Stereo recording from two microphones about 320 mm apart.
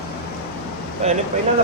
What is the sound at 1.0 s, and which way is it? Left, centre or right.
Speech, centre.